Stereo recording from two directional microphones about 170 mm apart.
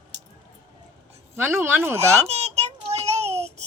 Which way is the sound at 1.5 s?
15° right (ahead or behind).